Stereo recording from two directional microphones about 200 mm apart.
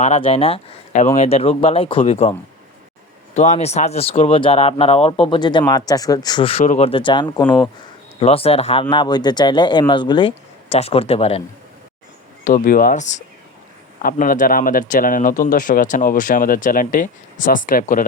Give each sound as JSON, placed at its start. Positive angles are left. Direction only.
{"t": 0.0, "sound": "speech", "side_deg": 30}
{"t": 3.3, "sound": "speech", "side_deg": 35}
{"t": 12.5, "sound": "speech", "side_deg": 40}